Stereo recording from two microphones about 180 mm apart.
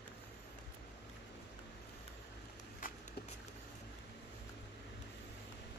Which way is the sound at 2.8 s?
50° left (ahead or behind).